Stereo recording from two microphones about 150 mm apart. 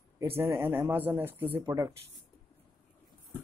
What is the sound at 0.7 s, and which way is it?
A man's voice, 15° right (ahead or behind).